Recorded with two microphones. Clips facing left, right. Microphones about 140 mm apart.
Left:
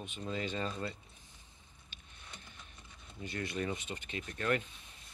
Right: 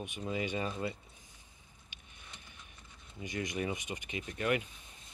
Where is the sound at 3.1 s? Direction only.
15° right (ahead or behind).